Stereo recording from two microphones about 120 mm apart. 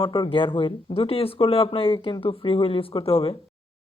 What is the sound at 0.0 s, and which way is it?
Speech, 45° left (ahead or behind).